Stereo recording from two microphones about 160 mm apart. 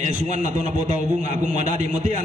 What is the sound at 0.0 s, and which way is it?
A man's voice, 50° right (ahead or behind).